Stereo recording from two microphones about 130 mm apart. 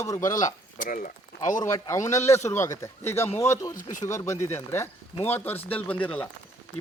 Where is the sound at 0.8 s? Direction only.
90° left.